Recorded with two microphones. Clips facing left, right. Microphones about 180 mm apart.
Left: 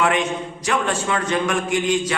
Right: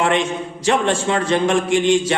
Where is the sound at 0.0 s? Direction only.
30° right (ahead or behind).